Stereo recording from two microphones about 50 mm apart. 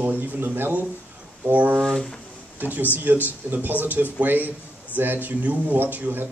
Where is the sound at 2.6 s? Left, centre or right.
Right.